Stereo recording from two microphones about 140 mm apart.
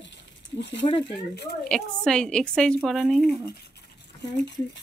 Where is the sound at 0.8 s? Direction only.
35° left (ahead or behind).